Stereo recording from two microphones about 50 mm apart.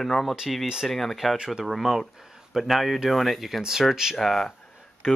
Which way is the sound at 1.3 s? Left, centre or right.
Centre.